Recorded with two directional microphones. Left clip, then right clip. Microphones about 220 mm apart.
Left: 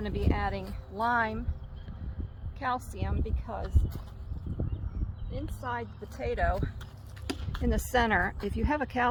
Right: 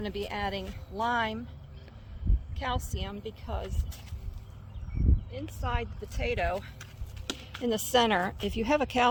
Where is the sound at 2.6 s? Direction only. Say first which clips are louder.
Left 2 dB; 30° right (ahead or behind).